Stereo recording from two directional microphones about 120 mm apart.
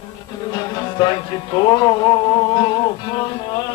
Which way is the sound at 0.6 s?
35° left (ahead or behind).